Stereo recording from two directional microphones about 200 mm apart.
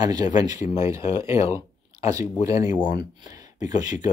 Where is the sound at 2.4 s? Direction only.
15° right (ahead or behind).